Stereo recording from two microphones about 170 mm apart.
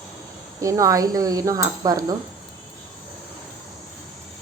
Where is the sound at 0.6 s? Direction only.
20° right (ahead or behind).